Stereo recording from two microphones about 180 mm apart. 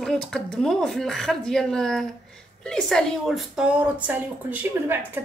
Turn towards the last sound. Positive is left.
turn(degrees=-10)  # may be behind; listen again after turning